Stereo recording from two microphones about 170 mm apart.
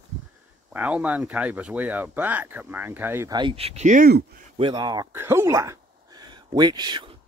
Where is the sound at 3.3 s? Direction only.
30° right (ahead or behind); by 4.4 s 60° right (ahead or behind).